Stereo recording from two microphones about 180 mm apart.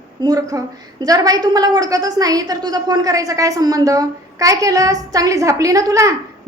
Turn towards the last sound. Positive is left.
turn(degrees=-20)  # may be behind; listen again after turning